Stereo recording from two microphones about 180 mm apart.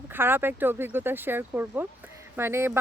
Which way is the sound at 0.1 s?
10° right (ahead or behind).